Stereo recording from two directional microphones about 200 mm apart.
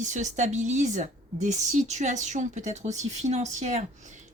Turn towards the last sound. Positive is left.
turn(degrees=-35)  # may be behind; listen again after turning